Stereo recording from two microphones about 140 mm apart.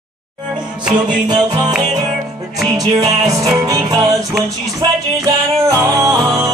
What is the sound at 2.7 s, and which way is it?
Music, 30° right (ahead or behind).